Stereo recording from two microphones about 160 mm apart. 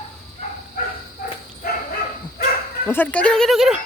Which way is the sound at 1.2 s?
70° left (ahead or behind).